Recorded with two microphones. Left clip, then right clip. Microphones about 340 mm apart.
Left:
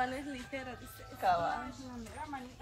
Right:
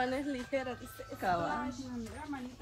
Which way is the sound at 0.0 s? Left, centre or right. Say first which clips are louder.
Right 2 dB; centre.